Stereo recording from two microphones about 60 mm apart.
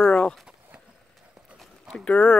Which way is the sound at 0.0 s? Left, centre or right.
Centre.